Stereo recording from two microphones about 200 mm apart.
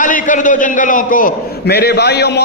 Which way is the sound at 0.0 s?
40° left (ahead or behind).